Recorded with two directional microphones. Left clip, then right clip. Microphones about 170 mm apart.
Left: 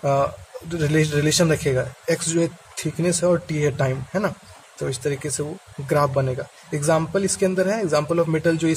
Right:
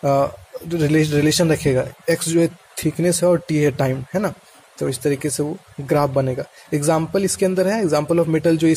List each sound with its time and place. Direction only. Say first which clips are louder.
0.0 s speech: right 3 dB; 25° right (ahead or behind)